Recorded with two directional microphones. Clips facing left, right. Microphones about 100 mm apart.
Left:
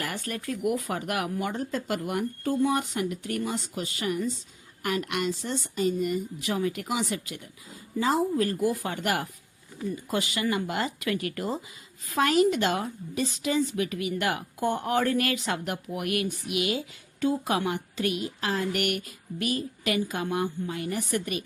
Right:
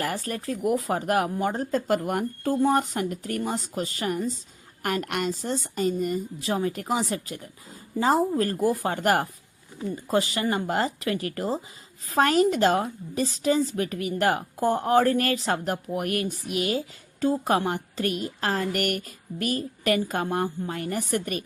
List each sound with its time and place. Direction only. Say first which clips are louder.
0.0 s a woman's voice: right 4 dB; 35° right (ahead or behind)